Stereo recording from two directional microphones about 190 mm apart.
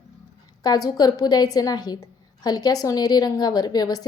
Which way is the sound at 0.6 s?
20° left (ahead or behind).